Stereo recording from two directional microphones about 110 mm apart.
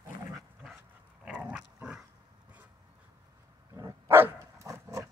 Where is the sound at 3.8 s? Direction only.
20° right (ahead or behind).